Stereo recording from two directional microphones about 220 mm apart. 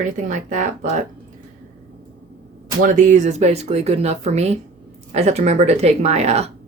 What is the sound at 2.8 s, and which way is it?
Speech, 35° right (ahead or behind).